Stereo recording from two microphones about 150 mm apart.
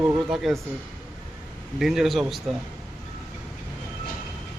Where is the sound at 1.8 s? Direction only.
Centre (ahead or behind).